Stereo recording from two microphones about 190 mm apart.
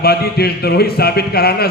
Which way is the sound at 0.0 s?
55° left (ahead or behind).